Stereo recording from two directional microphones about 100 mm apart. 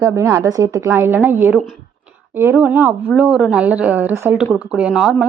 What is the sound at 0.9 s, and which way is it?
A woman's voice, 20° right (ahead or behind).